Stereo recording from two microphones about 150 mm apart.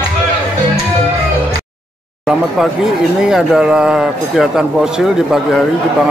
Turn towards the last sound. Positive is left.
turn(degrees=-5)  # may be behind; listen again after turning